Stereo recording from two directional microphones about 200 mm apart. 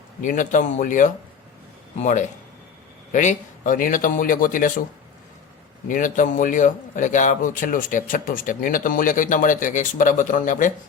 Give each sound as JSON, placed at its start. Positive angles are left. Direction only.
{"t": 0.2, "sound": "a man's voice", "side_deg": 40}
{"t": 5.9, "sound": "a man's voice", "side_deg": 40}